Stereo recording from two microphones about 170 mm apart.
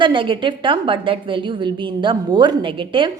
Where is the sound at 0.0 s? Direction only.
30° right (ahead or behind).